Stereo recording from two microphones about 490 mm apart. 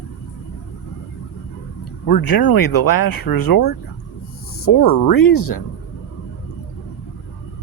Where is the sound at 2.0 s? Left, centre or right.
Left.